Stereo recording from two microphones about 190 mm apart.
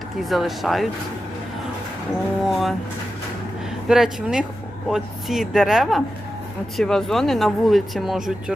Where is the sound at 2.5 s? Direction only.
Centre (ahead or behind).